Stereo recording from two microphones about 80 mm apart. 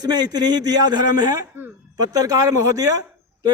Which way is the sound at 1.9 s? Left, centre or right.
Right.